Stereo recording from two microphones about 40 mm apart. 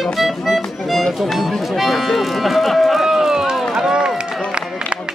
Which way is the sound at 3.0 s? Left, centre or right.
Centre.